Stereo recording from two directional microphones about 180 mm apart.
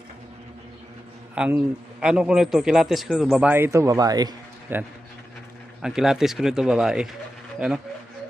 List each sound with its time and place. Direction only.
1.4 s a man's voice: 5° right (ahead or behind)